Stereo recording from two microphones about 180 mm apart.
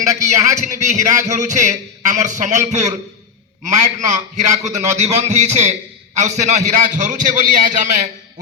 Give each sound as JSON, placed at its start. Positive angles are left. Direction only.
{"t": 0.0, "sound": "speech", "side_deg": -40}
{"t": 4.0, "sound": "a man's voice", "side_deg": -40}